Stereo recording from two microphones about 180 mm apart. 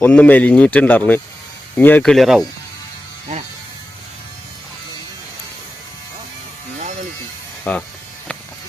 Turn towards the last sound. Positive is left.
turn(degrees=10)  # may be behind; listen again after turning